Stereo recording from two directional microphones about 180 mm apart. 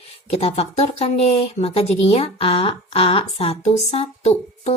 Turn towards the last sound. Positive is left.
turn(degrees=35)  # may be behind; listen again after turning